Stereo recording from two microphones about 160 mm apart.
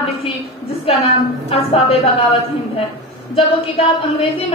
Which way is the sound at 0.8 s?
40° left (ahead or behind).